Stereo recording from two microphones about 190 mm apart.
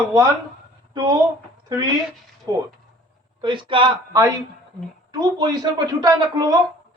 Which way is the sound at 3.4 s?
25° right (ahead or behind).